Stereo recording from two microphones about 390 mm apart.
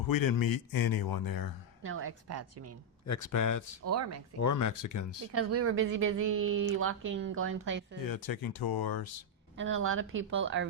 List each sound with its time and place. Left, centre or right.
0.0 s a man's voice: left
1.8 s a woman's voice: right
3.1 s speech: left
3.8 s a woman's voice: right
4.4 s speech: left
5.3 s a woman's voice: right
8.0 s a man's voice: left
9.6 s a woman's voice: right